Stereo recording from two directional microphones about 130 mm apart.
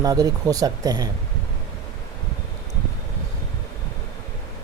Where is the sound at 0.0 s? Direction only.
30° right (ahead or behind).